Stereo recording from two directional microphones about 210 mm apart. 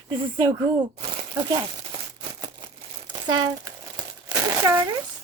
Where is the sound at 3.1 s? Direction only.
20° right (ahead or behind).